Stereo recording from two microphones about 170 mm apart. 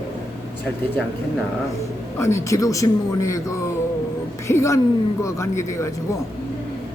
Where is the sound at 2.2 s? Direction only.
15° left (ahead or behind).